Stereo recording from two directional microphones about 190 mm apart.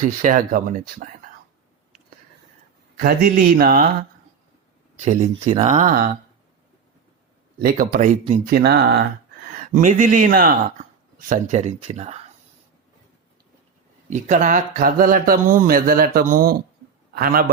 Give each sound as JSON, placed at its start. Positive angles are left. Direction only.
{"t": 0.0, "sound": "speech", "side_deg": -45}
{"t": 3.0, "sound": "speech", "side_deg": -50}
{"t": 5.0, "sound": "speech", "side_deg": -35}
{"t": 7.6, "sound": "speech", "side_deg": -50}
{"t": 8.4, "sound": "speech", "side_deg": -55}
{"t": 9.7, "sound": "speech", "side_deg": -40}
{"t": 14.1, "sound": "speech", "side_deg": -40}